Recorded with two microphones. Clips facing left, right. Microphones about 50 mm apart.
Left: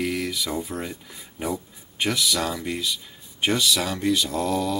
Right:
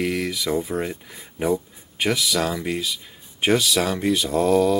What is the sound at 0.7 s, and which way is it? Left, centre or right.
Speech, right.